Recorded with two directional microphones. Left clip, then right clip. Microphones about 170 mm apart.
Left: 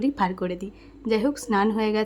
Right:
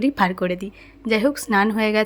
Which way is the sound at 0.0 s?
15° right (ahead or behind).